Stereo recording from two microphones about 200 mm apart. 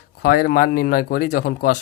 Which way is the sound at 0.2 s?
50° left (ahead or behind).